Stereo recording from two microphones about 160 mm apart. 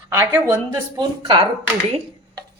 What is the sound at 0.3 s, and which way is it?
Speech, 30° right (ahead or behind).